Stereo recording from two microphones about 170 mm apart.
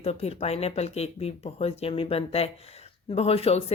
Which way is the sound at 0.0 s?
35° left (ahead or behind).